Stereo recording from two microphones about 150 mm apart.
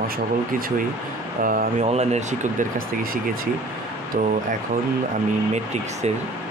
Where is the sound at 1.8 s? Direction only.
45° right (ahead or behind).